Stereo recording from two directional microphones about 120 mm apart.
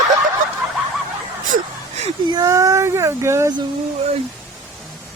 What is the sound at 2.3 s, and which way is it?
Speech, 30° right (ahead or behind).